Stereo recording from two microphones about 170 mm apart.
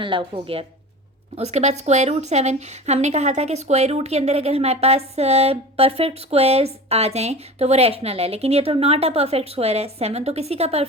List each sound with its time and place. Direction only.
0.0 s a woman's voice: 30° right (ahead or behind)